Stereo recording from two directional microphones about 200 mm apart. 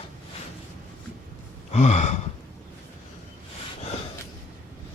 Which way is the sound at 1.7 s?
35° left (ahead or behind).